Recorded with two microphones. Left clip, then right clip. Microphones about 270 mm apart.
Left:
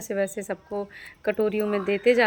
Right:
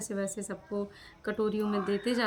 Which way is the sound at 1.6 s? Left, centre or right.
Left.